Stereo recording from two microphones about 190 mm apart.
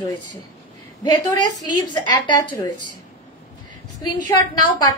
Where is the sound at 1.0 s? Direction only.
20° left (ahead or behind).